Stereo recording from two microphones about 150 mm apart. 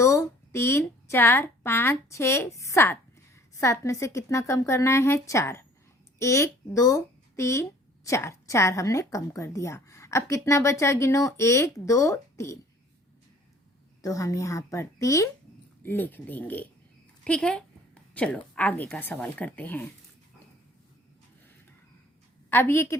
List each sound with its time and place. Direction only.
0.0 s speech: 20° left (ahead or behind)
14.0 s a woman's voice: 20° left (ahead or behind)
22.4 s speech: 15° left (ahead or behind)